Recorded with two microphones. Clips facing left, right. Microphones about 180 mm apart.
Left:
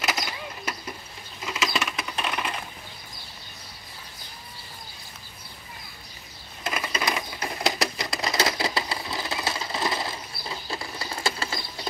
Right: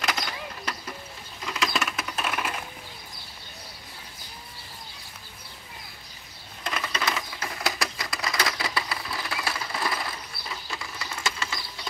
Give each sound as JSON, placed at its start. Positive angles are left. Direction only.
{"t": 0.0, "sound": "a sound", "side_deg": 5}
{"t": 1.4, "sound": "rodents", "side_deg": 5}
{"t": 6.6, "sound": "typewriter", "side_deg": 10}